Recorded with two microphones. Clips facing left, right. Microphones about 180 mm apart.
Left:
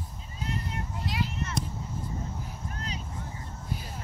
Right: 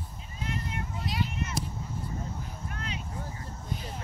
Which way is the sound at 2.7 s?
35° left (ahead or behind).